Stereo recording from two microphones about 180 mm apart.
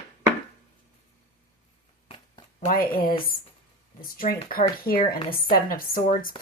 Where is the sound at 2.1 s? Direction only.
30° left (ahead or behind).